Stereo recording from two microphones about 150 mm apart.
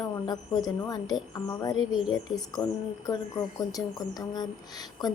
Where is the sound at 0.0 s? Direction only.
25° left (ahead or behind).